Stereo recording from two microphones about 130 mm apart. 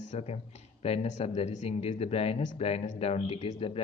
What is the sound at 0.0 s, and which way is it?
A man's voice, 65° left (ahead or behind).